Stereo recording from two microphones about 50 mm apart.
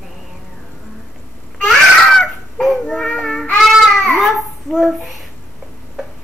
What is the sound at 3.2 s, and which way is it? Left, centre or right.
Music, centre.